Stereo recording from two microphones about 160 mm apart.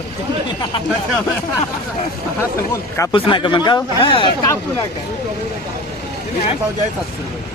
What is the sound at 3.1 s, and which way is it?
Speech, 30° left (ahead or behind).